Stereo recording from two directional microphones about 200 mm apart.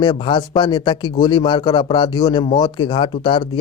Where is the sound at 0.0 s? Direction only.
20° left (ahead or behind).